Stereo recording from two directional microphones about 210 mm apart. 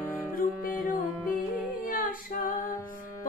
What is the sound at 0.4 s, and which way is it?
Music, 40° left (ahead or behind).